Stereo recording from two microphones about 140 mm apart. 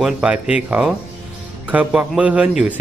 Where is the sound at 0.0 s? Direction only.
10° right (ahead or behind).